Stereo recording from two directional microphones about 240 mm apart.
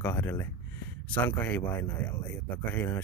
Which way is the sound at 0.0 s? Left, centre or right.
Centre.